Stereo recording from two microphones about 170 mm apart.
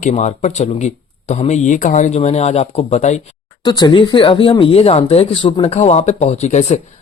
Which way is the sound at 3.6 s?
25° left (ahead or behind).